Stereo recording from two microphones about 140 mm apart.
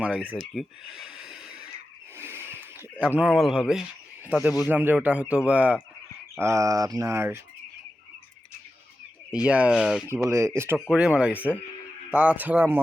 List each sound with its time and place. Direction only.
0.0 s a man's voice: 10° right (ahead or behind)
0.5 s snort: 5° right (ahead or behind)
2.1 s a sound: 15° right (ahead or behind)
3.0 s a man's voice: 10° right (ahead or behind)
6.4 s speech: 20° right (ahead or behind)
9.4 s a man's voice: 10° right (ahead or behind)
10.1 s speech: 20° right (ahead or behind)
10.8 s a man's voice: 5° right (ahead or behind)